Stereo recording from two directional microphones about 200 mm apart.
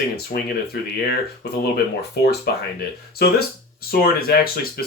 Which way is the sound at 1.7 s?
55° left (ahead or behind).